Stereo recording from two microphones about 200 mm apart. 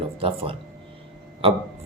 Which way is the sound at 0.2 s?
30° right (ahead or behind).